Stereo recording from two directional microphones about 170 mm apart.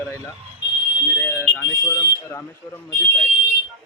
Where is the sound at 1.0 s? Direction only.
15° left (ahead or behind).